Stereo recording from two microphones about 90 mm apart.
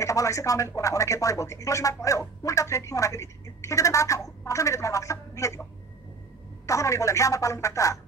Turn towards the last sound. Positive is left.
turn(degrees=35)  # may be behind; listen again after turning